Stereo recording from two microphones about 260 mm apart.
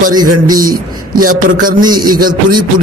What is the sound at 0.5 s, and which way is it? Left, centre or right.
Speech, right.